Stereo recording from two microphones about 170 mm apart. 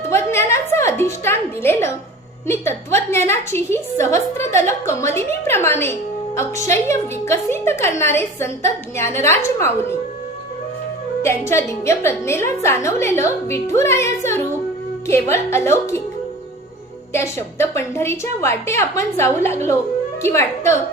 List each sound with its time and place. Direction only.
0.1 s a sound: 15° left (ahead or behind)
2.5 s music: 15° left (ahead or behind)
3.2 s a woman's voice: 15° left (ahead or behind)
4.9 s music: 15° left (ahead or behind)
9.2 s a woman's voice: 15° left (ahead or behind)
11.2 s a woman's voice: 15° left (ahead or behind)
17.1 s a woman's voice: 15° left (ahead or behind)